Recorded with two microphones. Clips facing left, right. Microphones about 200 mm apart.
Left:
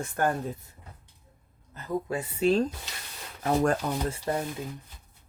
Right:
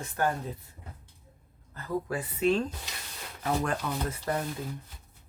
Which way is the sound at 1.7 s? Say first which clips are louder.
Left 1 dB; 20° left (ahead or behind).